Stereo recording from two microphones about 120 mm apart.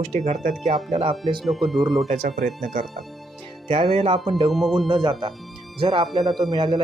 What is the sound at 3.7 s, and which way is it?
Speech, 50° right (ahead or behind).